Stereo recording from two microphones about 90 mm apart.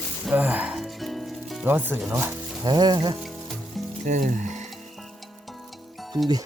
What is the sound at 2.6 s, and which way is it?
Music, 50° right (ahead or behind).